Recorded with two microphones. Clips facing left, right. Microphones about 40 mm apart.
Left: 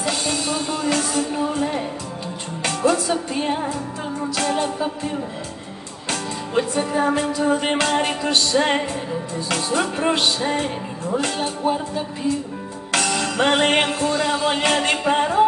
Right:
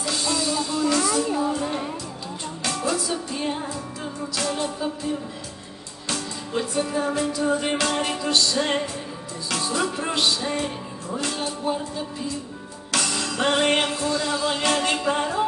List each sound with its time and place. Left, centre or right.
0.0 s music: left
12.9 s music: left